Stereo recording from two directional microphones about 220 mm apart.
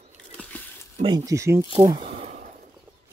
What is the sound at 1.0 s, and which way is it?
Speech, 15° right (ahead or behind).